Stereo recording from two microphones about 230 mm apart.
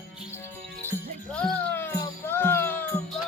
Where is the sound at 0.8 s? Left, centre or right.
Centre.